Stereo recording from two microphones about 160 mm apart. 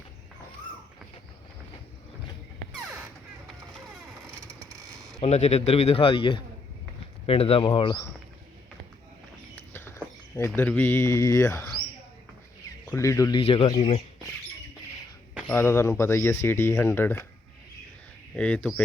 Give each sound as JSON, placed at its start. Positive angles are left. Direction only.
{"t": 2.7, "sound": "music", "side_deg": -5}
{"t": 5.2, "sound": "a man's voice", "side_deg": 45}
{"t": 7.7, "sound": "speech", "side_deg": 25}
{"t": 9.6, "sound": "speech", "side_deg": 15}
{"t": 12.8, "sound": "speech", "side_deg": 15}
{"t": 13.3, "sound": "a man's voice", "side_deg": 35}
{"t": 15.4, "sound": "speech", "side_deg": 15}
{"t": 18.3, "sound": "speech", "side_deg": 5}